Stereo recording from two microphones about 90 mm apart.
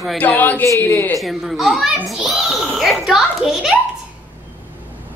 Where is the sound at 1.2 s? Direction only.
Centre (ahead or behind).